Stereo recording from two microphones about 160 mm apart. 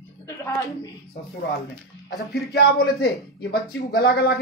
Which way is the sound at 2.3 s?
75° left (ahead or behind).